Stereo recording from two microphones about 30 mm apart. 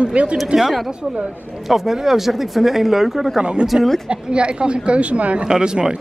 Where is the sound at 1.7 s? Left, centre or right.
Centre.